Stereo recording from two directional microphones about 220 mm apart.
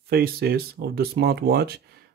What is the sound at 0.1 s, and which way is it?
Speech, 45° right (ahead or behind).